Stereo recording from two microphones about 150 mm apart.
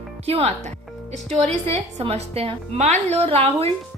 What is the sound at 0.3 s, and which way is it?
Speech, 45° right (ahead or behind).